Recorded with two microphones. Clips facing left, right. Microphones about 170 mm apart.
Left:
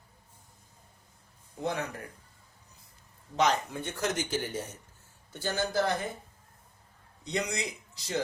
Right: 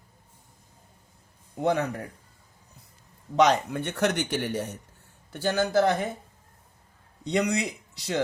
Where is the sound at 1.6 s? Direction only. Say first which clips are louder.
Right 8 dB; 60° right (ahead or behind).